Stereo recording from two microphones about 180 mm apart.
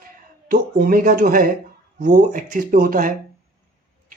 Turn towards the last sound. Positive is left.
turn(degrees=-50)  # may be behind; listen again after turning